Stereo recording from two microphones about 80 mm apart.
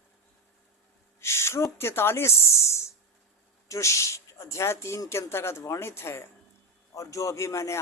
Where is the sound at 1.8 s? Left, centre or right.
Left.